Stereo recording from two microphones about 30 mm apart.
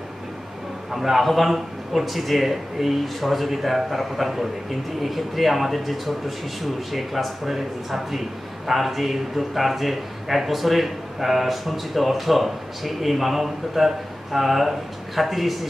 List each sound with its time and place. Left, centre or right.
0.9 s a man's voice: centre